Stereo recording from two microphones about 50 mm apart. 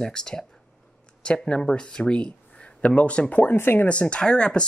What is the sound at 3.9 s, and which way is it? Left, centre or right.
Speech, left.